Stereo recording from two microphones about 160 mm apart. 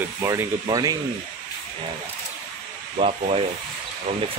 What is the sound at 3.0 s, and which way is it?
Sanding, 40° right (ahead or behind).